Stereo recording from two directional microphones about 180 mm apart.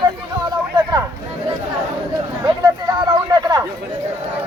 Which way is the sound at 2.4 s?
25° right (ahead or behind).